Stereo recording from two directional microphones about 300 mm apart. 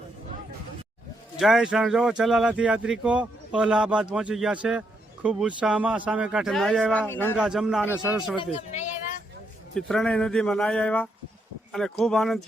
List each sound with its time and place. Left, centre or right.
1.4 s speech: centre
8.4 s speech: left
9.7 s speech: centre